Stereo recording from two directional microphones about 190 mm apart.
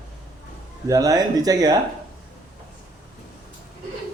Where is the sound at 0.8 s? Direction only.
15° right (ahead or behind).